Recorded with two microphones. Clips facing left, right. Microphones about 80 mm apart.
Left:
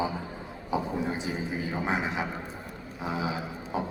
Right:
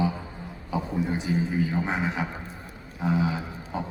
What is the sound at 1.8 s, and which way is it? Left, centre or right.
Speech, centre.